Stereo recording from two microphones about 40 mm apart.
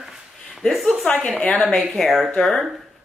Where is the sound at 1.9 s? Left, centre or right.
Centre.